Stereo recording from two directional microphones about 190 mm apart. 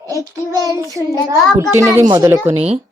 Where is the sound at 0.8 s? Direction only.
15° right (ahead or behind).